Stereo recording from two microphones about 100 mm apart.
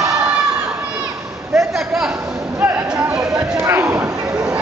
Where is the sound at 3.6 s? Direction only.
25° right (ahead or behind).